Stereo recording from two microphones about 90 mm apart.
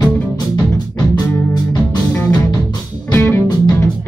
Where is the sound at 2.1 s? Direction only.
20° left (ahead or behind).